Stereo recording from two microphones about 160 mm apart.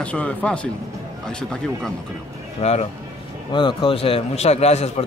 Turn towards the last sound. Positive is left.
turn(degrees=40)  # may be behind; listen again after turning